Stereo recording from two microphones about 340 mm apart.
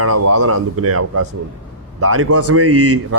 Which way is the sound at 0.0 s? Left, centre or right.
Right.